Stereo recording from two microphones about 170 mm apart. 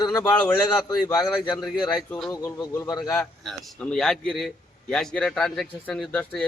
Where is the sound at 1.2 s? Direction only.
Centre (ahead or behind).